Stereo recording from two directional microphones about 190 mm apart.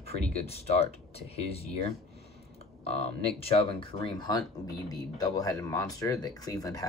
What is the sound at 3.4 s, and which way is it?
Speech, 30° left (ahead or behind).